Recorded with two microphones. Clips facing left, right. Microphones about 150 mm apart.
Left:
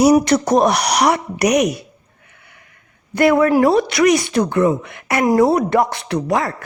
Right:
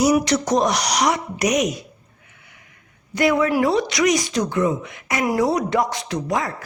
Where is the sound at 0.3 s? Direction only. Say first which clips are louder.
Left 5 dB; 55° left (ahead or behind).